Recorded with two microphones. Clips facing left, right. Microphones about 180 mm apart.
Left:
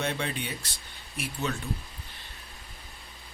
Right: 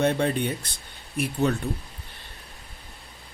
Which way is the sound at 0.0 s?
55° right (ahead or behind).